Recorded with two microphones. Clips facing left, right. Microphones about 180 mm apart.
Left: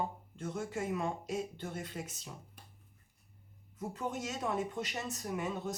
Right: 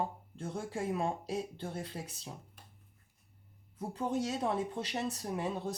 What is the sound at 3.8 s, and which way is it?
Speech, 30° right (ahead or behind).